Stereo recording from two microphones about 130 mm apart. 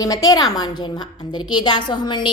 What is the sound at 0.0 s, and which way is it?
A woman's voice, 30° left (ahead or behind).